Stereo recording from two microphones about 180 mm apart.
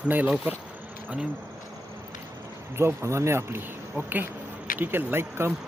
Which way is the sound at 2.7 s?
15° right (ahead or behind).